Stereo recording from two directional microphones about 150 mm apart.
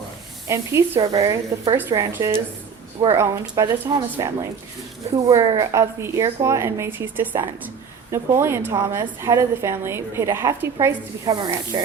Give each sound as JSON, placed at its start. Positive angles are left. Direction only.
{"t": 0.4, "sound": "a woman's voice", "side_deg": -20}
{"t": 11.3, "sound": "speech", "side_deg": -30}